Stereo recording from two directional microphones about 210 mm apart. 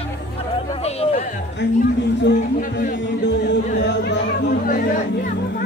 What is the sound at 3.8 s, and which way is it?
Chatter, 55° left (ahead or behind).